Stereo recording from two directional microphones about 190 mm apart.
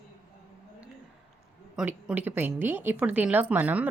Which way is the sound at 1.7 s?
5° right (ahead or behind).